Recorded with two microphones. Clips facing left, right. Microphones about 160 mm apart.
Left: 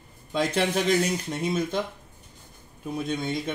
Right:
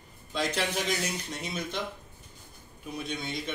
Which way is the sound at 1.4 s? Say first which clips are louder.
Left 10 dB; 50° left (ahead or behind).